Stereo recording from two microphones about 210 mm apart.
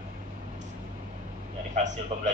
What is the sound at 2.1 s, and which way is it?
Speech, 35° right (ahead or behind).